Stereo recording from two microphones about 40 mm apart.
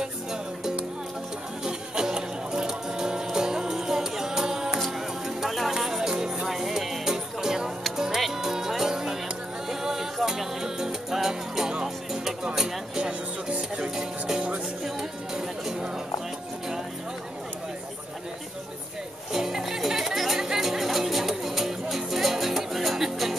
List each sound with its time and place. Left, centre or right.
0.0 s music: centre
19.3 s music: centre